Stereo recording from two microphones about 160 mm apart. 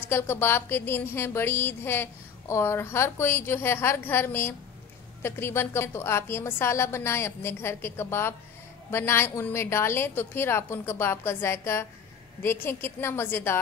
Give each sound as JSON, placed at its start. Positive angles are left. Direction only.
{"t": 0.1, "sound": "a woman's voice", "side_deg": 15}